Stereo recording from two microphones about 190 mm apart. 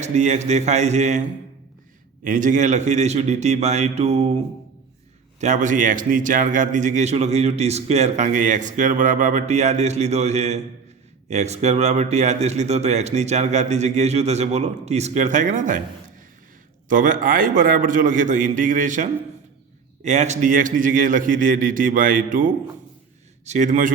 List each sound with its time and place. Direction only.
0.0 s a man's voice: 35° right (ahead or behind)
2.2 s a man's voice: 45° right (ahead or behind)
5.4 s a man's voice: 40° right (ahead or behind)
16.9 s a man's voice: 45° right (ahead or behind)
20.1 s a man's voice: 40° right (ahead or behind)